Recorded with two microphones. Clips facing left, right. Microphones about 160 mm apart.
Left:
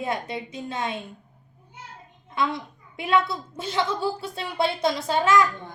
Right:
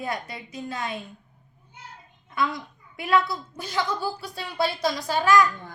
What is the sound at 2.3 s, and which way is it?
A woman's voice, 25° left (ahead or behind).